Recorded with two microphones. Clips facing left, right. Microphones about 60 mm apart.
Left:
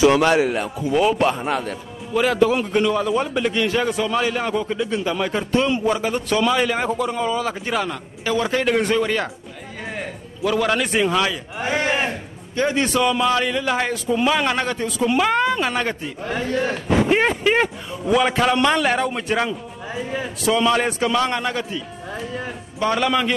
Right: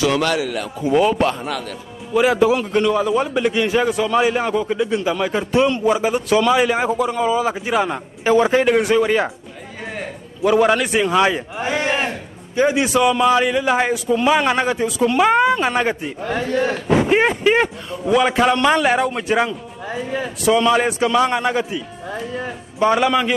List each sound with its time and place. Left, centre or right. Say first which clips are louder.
0.0 s a man's voice: left 3 dB; left
0.7 s speech: right 4 dB; centre
2.1 s speech: right 2 dB; centre
7.9 s a man's voice: right 7 dB; right
8.6 s speech: right 4 dB; centre
10.4 s speech: right 5 dB; centre
10.8 s speech: right 3 dB; centre
22.1 s speech: right 3 dB; centre